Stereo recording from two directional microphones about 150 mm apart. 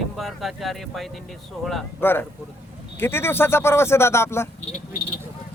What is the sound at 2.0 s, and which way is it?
Speech, 15° left (ahead or behind).